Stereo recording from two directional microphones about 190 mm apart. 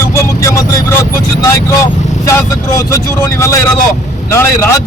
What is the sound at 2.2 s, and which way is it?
A man's voice, 15° left (ahead or behind).